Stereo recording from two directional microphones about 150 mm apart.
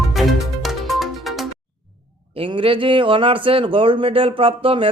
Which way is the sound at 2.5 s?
35° right (ahead or behind).